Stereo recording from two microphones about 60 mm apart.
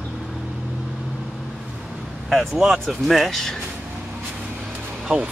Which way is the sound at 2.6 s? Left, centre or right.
Centre.